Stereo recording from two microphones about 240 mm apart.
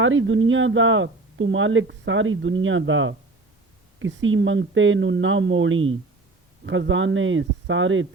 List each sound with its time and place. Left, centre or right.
0.0 s speech: right